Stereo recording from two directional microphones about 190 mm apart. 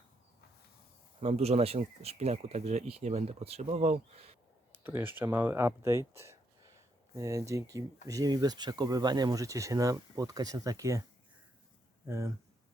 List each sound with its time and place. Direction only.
1.2 s speech: 35° right (ahead or behind)
4.8 s speech: 10° right (ahead or behind)
12.0 s speech: 15° right (ahead or behind)